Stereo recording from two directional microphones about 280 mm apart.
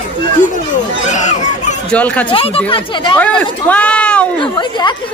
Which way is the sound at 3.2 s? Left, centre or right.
Centre.